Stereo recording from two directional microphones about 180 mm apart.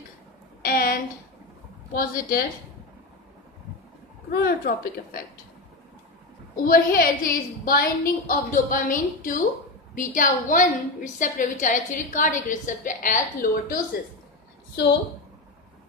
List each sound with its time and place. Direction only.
0.6 s a sound: 55° left (ahead or behind)
2.0 s a woman's voice: 50° left (ahead or behind)
4.3 s a woman's voice: 60° left (ahead or behind)
6.6 s a woman's voice: 55° left (ahead or behind)